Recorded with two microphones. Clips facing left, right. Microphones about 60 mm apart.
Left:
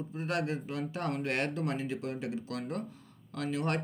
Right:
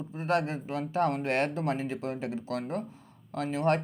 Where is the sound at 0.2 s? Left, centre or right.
Right.